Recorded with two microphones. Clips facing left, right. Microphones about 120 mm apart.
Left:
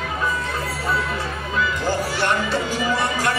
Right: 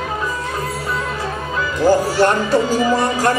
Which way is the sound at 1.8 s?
40° right (ahead or behind).